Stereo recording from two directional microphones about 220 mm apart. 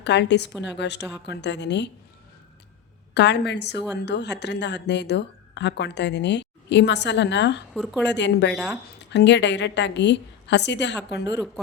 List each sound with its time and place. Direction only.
0.0 s a woman's voice: 50° left (ahead or behind)
3.2 s a woman's voice: 50° left (ahead or behind)
7.7 s speech: centre (ahead or behind)
8.0 s a woman's voice: 50° left (ahead or behind)